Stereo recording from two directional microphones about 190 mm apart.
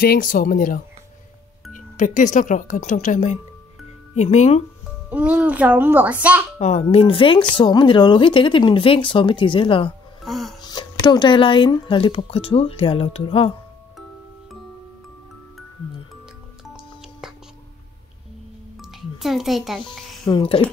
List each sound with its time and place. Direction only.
0.0 s speech: 50° left (ahead or behind)
5.1 s a child's voice: 5° right (ahead or behind)
6.6 s a woman's voice: 35° left (ahead or behind)
10.2 s music: centre (ahead or behind)
10.6 s a woman's voice: 20° left (ahead or behind)
18.8 s music: centre (ahead or behind)
19.8 s speech: 25° left (ahead or behind)